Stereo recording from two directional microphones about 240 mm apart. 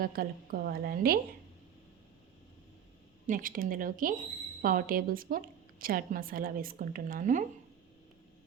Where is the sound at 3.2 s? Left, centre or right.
Right.